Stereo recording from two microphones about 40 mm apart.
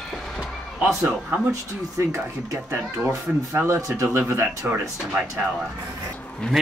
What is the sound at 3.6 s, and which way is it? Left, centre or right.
Speech, right.